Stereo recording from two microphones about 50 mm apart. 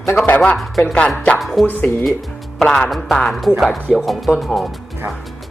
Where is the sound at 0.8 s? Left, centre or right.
Left.